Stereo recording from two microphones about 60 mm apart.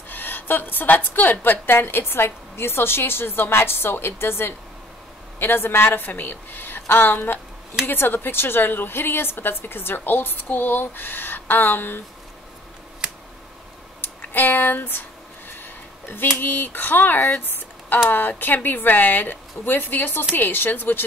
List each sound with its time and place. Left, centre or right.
0.1 s a woman's voice: left
14.0 s a sound: left
18.4 s a woman's voice: left